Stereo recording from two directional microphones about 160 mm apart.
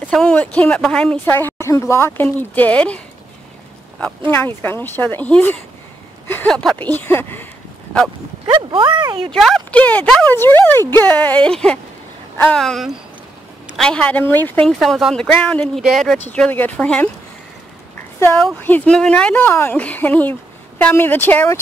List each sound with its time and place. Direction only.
0.0 s speech: 5° left (ahead or behind)
4.3 s speech: 15° left (ahead or behind)
8.5 s speech: 30° right (ahead or behind)
9.3 s speech: 5° left (ahead or behind)
18.2 s speech: 5° left (ahead or behind)